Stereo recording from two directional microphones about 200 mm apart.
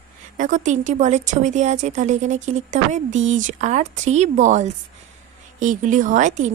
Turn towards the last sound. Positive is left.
turn(degrees=-40)  # may be behind; listen again after turning